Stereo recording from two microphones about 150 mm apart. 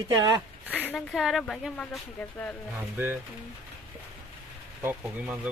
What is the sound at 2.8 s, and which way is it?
Speech, 15° right (ahead or behind).